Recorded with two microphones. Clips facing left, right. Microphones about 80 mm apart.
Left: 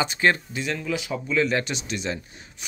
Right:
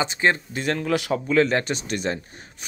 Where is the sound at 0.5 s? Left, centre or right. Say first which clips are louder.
Right 4 dB; right.